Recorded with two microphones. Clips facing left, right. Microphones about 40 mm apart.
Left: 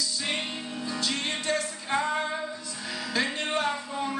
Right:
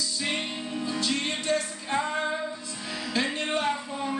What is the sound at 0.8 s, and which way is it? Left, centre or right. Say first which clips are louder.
Music: right 1 dB; centre.